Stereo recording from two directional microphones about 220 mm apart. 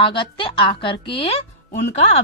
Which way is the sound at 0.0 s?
20° left (ahead or behind).